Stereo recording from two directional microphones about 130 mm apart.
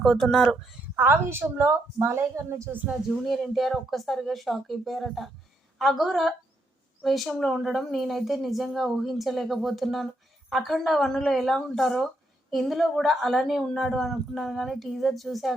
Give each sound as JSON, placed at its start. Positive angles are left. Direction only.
{"t": 0.0, "sound": "speech", "side_deg": 0}
{"t": 0.9, "sound": "a woman's voice", "side_deg": -20}
{"t": 3.1, "sound": "speech", "side_deg": 0}